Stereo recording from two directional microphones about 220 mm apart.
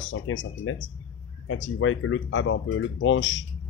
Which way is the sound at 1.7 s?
65° left (ahead or behind).